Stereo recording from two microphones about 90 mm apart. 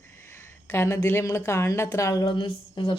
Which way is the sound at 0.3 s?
25° left (ahead or behind).